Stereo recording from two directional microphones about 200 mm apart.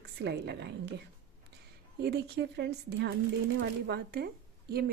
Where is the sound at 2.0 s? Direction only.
55° right (ahead or behind).